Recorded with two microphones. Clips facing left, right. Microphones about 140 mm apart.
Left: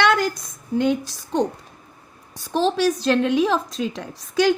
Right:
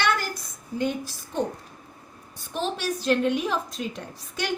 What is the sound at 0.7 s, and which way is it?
Speech, 80° left.